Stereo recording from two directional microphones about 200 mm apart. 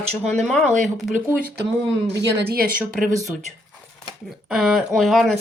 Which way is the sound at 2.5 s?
45° right (ahead or behind).